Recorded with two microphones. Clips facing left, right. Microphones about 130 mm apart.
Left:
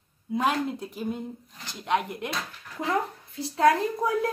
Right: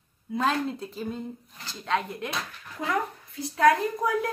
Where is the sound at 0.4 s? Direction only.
15° left (ahead or behind).